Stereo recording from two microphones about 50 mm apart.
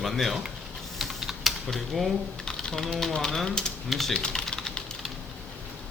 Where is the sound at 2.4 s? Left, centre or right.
Centre.